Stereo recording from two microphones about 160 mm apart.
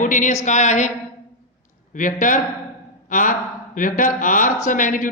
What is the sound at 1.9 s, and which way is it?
A woman's voice, 55° left (ahead or behind).